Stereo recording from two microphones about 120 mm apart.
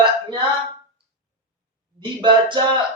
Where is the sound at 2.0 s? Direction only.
40° right (ahead or behind).